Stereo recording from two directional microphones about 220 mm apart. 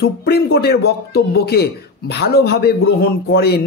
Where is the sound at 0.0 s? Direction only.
45° left (ahead or behind).